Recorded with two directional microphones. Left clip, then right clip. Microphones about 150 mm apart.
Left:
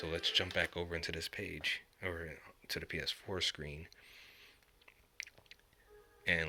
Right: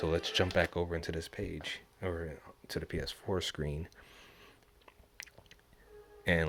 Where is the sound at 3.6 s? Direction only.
35° right (ahead or behind).